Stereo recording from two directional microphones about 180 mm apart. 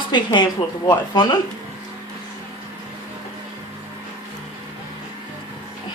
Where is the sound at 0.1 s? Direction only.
25° left (ahead or behind).